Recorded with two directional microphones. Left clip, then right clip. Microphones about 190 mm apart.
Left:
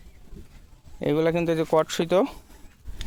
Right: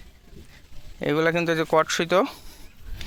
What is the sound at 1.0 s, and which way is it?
Speech, 10° left (ahead or behind).